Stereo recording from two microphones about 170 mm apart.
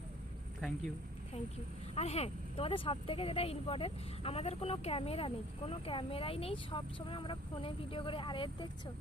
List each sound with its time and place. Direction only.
2.0 s speech: 40° left (ahead or behind)